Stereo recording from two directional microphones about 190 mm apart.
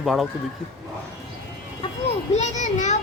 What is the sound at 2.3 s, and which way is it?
Children playing, 35° left (ahead or behind).